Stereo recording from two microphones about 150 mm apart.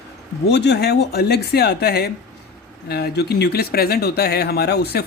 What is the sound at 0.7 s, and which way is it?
Speech, 90° left.